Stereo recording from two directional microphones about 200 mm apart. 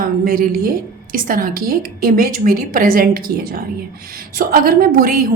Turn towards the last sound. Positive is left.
turn(degrees=-45)  # may be behind; listen again after turning